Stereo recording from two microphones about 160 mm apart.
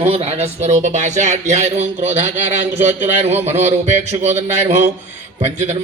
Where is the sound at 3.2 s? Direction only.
45° right (ahead or behind).